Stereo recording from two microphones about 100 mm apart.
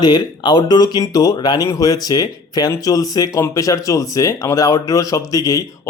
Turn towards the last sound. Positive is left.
turn(degrees=35)  # may be behind; listen again after turning